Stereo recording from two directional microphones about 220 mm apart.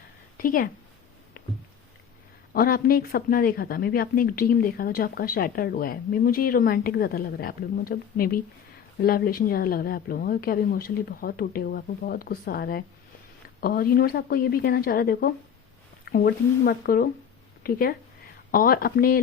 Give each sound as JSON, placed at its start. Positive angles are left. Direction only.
{"t": 0.3, "sound": "a woman's voice", "side_deg": 40}
{"t": 2.5, "sound": "speech", "side_deg": 40}